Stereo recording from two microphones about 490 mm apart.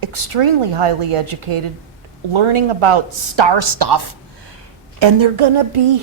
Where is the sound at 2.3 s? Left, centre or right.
Right.